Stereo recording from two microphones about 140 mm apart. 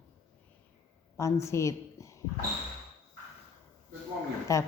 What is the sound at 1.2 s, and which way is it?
Speech, 20° left (ahead or behind).